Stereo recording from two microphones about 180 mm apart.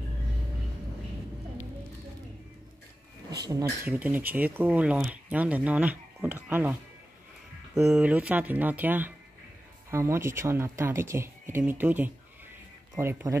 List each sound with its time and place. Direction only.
3.3 s speech: 20° right (ahead or behind)